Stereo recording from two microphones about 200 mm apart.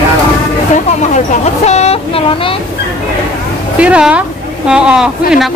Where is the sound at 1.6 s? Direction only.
30° left (ahead or behind).